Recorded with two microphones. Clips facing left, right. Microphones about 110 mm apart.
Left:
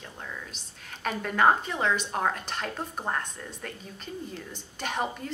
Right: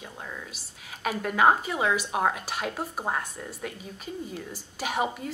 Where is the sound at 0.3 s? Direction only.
5° right (ahead or behind).